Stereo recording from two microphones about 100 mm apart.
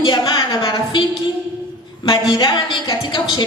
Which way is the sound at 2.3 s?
50° left (ahead or behind).